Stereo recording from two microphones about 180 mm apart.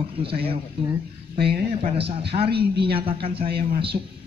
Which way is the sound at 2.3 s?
45° right (ahead or behind).